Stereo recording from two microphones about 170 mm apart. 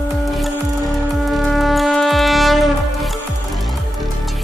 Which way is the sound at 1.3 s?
Centre (ahead or behind).